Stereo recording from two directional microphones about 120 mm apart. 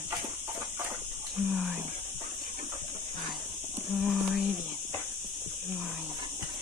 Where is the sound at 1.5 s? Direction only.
15° right (ahead or behind).